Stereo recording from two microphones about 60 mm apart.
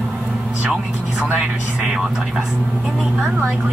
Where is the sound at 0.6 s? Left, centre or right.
Centre.